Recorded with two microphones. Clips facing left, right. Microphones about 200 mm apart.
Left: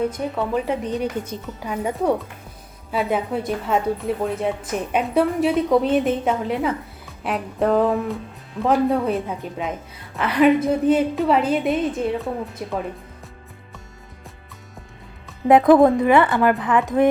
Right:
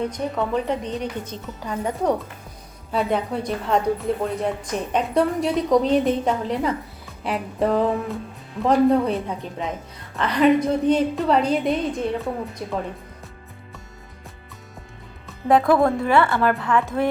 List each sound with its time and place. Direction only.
0.0 s a woman's voice: 5° left (ahead or behind)
15.4 s a woman's voice: 20° left (ahead or behind)